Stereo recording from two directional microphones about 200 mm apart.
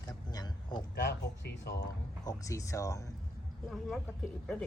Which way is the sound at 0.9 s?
60° left (ahead or behind).